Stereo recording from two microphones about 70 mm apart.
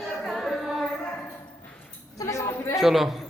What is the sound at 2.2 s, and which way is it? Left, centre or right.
Speech, left.